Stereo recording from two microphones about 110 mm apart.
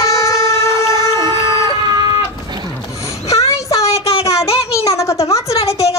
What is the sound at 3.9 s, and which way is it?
Child singing, 65° left (ahead or behind).